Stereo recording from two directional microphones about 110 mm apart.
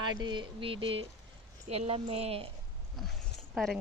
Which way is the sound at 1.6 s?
80° right.